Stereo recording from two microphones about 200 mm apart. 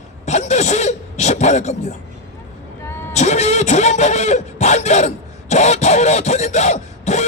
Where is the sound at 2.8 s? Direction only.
15° left (ahead or behind).